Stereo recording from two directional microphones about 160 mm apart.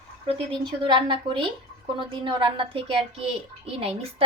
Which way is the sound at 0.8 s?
30° right (ahead or behind).